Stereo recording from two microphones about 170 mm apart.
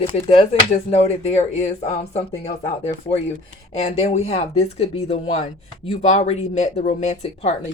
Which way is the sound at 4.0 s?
40° left (ahead or behind).